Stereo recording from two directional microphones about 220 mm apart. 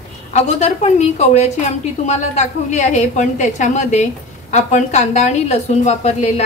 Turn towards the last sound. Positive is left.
turn(degrees=30)  # may be behind; listen again after turning